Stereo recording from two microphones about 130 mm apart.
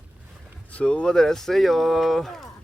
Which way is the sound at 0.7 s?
10° left (ahead or behind).